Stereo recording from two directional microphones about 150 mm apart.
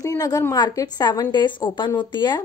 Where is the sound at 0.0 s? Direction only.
25° left (ahead or behind).